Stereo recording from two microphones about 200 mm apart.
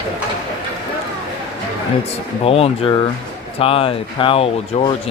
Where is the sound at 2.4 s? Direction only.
30° left (ahead or behind).